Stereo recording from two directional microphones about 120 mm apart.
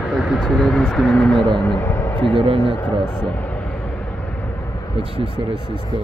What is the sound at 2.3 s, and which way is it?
Speech, 45° right (ahead or behind).